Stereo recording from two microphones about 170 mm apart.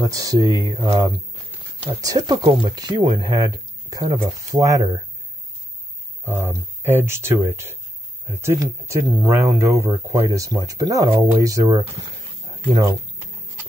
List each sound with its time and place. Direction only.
0.0 s speech: 20° right (ahead or behind)
6.2 s speech: 15° right (ahead or behind)
11.6 s speech: 35° right (ahead or behind)